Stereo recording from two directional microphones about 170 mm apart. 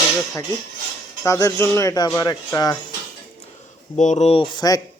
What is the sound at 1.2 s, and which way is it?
Speech, 15° left (ahead or behind).